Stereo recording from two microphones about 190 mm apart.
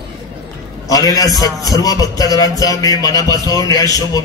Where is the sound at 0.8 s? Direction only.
20° left (ahead or behind).